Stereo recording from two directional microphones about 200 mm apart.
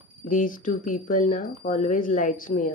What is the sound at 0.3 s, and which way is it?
Speech, 40° left (ahead or behind).